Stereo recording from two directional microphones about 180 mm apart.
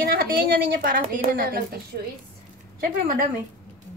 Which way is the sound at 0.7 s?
50° right (ahead or behind).